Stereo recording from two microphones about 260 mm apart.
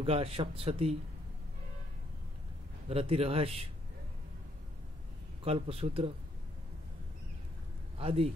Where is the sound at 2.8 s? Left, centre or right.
Right.